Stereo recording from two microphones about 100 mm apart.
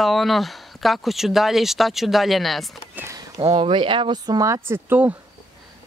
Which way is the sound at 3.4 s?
60° right (ahead or behind).